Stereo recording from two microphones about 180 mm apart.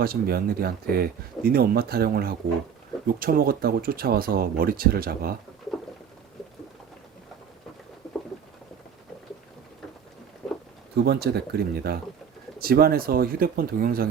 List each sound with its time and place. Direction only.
0.0 s speech: 55° right (ahead or behind)
10.4 s a sound: centre (ahead or behind)
10.9 s speech: 65° right (ahead or behind)